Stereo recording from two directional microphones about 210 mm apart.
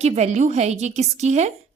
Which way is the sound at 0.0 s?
30° right (ahead or behind).